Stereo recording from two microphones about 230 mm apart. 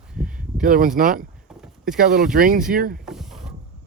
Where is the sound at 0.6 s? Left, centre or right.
Right.